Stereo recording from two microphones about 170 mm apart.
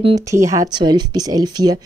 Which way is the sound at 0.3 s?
20° right (ahead or behind).